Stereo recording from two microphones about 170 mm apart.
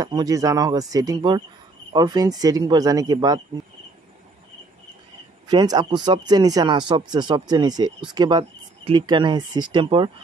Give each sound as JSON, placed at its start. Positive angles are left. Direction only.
{"t": 0.0, "sound": "speech", "side_deg": -20}
{"t": 5.5, "sound": "speech", "side_deg": -25}